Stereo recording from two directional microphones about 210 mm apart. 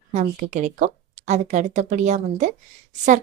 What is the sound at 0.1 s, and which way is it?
Speech, 35° right (ahead or behind).